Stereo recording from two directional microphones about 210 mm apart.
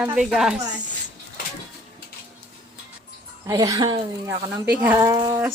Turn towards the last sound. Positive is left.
turn(degrees=-10)  # may be behind; listen again after turning